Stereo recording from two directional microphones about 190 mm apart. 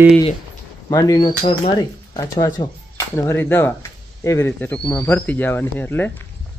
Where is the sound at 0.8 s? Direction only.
20° left (ahead or behind).